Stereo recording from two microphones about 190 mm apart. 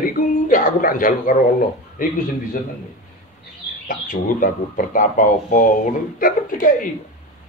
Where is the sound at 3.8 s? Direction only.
45° left (ahead or behind).